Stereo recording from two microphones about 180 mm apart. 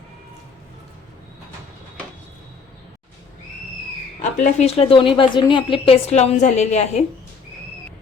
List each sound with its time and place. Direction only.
4.2 s a woman's voice: 45° left (ahead or behind)